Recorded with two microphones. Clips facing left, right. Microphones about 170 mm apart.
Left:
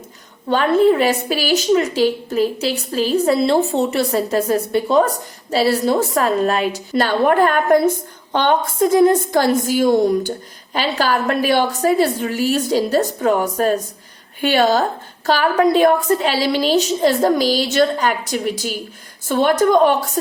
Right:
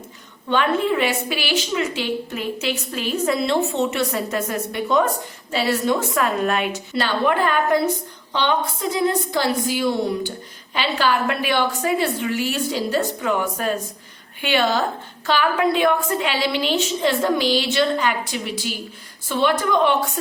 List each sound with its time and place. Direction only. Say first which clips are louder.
0.4 s a woman's voice: left 6 dB; 40° left (ahead or behind)